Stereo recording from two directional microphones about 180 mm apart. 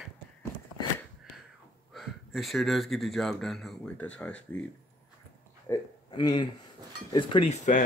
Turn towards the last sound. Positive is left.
turn(degrees=40)  # may be behind; listen again after turning